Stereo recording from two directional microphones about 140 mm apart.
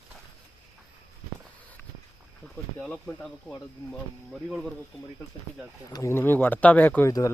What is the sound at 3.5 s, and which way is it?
Speech, 10° left (ahead or behind).